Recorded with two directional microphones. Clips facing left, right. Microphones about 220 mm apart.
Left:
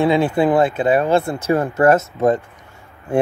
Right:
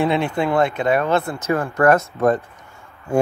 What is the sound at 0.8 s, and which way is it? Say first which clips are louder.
Speech: left 3 dB; 30° left (ahead or behind).